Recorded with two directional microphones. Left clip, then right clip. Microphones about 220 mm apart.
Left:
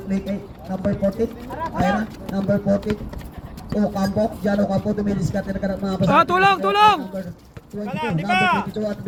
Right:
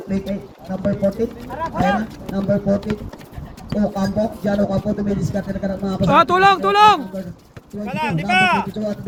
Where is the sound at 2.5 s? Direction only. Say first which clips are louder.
Right 1 dB; 50° left (ahead or behind).